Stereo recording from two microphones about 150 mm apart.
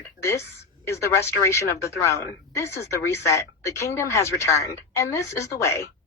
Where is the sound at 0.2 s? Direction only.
20° left (ahead or behind).